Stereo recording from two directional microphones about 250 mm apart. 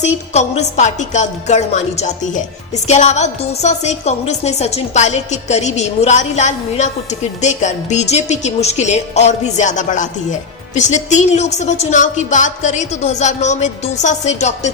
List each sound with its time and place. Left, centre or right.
0.0 s a woman's voice: left